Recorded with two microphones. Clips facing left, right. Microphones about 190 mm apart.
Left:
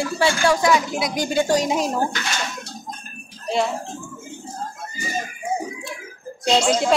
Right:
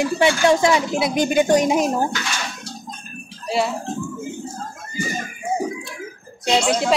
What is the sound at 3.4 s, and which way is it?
Bathtub, 5° right (ahead or behind).